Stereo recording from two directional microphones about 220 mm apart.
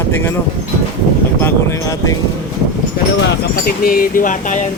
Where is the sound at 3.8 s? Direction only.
40° left (ahead or behind).